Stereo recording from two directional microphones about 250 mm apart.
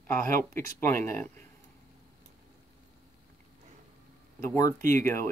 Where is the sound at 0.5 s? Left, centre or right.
Centre.